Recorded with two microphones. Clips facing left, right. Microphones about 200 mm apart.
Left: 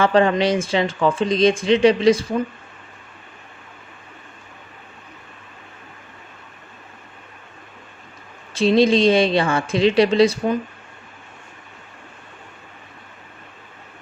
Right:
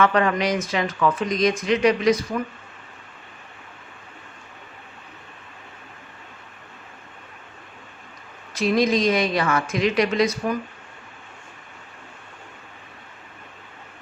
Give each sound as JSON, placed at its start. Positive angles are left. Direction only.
{"t": 0.0, "sound": "speech", "side_deg": 30}
{"t": 8.5, "sound": "speech", "side_deg": 30}